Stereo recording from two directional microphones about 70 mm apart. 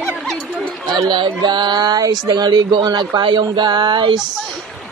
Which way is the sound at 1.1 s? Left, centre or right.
Right.